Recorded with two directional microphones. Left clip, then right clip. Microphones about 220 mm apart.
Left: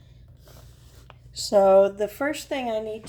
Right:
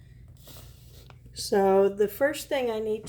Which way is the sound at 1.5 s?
20° left (ahead or behind).